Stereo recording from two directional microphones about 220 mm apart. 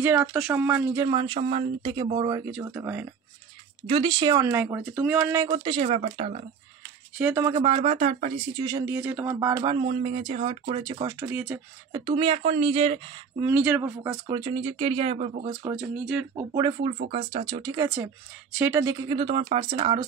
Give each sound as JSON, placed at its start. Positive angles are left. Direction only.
{"t": 0.0, "sound": "speech", "side_deg": -10}
{"t": 2.5, "sound": "speech", "side_deg": -10}
{"t": 3.8, "sound": "speech", "side_deg": -25}
{"t": 7.2, "sound": "speech", "side_deg": -10}
{"t": 7.5, "sound": "speech", "side_deg": -25}
{"t": 8.6, "sound": "speech", "side_deg": -15}
{"t": 12.1, "sound": "speech", "side_deg": -25}
{"t": 13.4, "sound": "speech", "side_deg": -10}
{"t": 15.7, "sound": "speech", "side_deg": 0}
{"t": 16.3, "sound": "speech", "side_deg": -20}
{"t": 17.8, "sound": "speech", "side_deg": -10}